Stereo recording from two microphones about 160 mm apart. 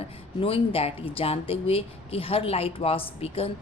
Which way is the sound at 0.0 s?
35° left (ahead or behind).